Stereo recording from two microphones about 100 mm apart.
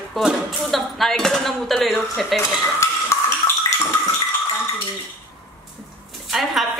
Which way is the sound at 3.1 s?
30° left (ahead or behind).